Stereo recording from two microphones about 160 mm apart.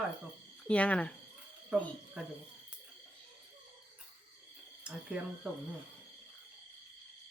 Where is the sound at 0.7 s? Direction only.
5° left (ahead or behind).